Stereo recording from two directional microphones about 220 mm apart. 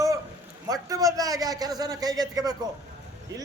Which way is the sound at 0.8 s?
15° right (ahead or behind).